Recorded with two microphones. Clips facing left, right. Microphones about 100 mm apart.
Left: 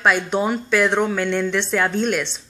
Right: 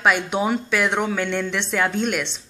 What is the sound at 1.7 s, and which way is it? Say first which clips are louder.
Speech: right 1 dB; 35° left (ahead or behind).